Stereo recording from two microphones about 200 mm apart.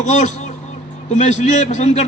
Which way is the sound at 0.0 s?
35° left (ahead or behind).